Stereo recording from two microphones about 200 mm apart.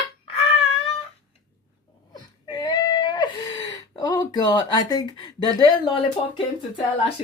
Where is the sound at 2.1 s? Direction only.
20° left (ahead or behind).